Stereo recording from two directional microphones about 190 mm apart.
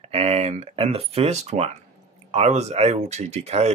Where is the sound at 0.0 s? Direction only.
30° right (ahead or behind).